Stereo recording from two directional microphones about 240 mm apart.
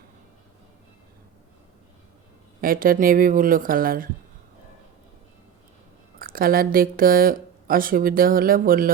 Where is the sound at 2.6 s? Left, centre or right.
Right.